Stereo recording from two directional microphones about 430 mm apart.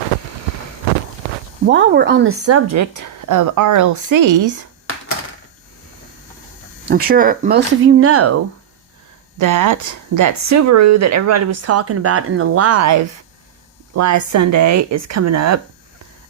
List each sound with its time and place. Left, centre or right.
1.7 s speech: right
6.8 s speech: right
9.4 s speech: right